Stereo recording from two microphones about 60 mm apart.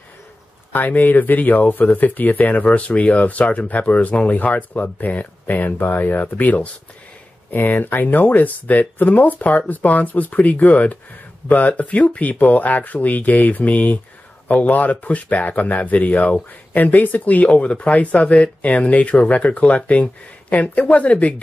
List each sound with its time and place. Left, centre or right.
0.7 s speech: left